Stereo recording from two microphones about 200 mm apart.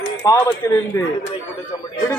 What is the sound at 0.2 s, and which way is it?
Speech, 15° left (ahead or behind).